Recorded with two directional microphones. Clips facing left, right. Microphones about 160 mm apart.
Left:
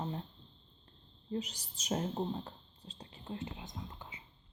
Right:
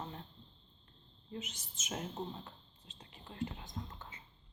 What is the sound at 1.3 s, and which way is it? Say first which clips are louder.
Speech: left 7 dB; 35° left (ahead or behind).